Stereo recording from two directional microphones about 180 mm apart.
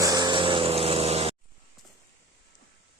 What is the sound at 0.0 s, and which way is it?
Vehicle, 20° right (ahead or behind).